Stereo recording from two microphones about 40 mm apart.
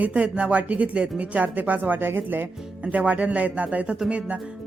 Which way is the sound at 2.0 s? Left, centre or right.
Right.